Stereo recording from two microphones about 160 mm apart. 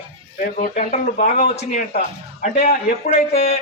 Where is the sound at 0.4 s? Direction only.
55° left (ahead or behind).